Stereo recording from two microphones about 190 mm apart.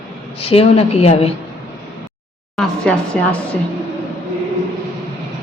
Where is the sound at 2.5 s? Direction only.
5° left (ahead or behind).